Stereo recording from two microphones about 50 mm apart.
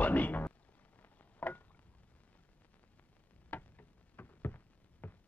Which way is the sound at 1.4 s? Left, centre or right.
Left.